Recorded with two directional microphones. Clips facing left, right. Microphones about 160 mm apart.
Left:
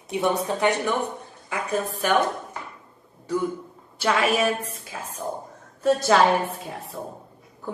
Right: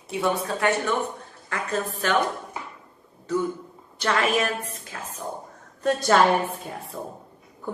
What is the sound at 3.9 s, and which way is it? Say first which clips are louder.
A woman's voice: left 1 dB; 5° left (ahead or behind).